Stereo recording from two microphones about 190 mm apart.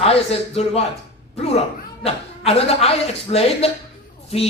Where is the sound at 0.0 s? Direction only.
30° left (ahead or behind).